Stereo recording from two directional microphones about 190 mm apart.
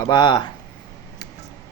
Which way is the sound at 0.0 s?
25° left (ahead or behind).